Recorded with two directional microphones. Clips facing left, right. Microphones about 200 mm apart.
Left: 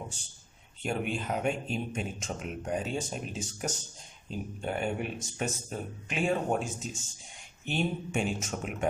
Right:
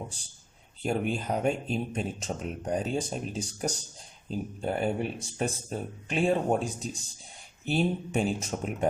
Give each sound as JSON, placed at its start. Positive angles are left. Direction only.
{"t": 0.8, "sound": "speech", "side_deg": -35}